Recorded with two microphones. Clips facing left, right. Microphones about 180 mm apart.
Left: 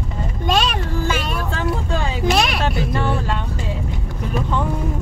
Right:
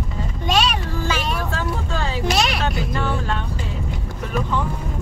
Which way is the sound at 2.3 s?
55° left (ahead or behind).